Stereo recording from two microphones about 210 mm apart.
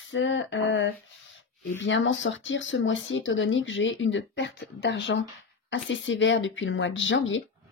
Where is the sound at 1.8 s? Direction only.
65° left (ahead or behind).